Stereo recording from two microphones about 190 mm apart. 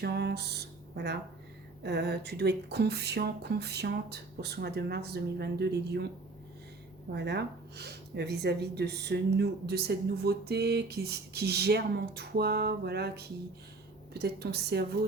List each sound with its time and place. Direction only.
0.0 s music: 60° right (ahead or behind)
1.8 s speech: 60° right (ahead or behind)
7.1 s speech: 60° right (ahead or behind)